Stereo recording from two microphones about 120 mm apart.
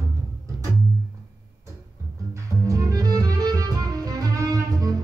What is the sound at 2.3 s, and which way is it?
Music, 25° right (ahead or behind).